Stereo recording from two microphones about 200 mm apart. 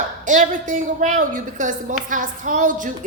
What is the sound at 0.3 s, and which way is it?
Speech, 40° right (ahead or behind).